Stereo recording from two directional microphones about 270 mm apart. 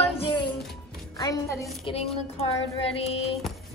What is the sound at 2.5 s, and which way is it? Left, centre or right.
Music, left.